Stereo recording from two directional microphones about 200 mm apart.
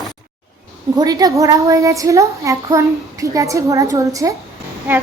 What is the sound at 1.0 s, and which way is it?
A woman's voice, 20° right (ahead or behind).